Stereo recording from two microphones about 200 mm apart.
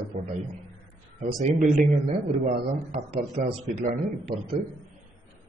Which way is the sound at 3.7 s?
45° right (ahead or behind).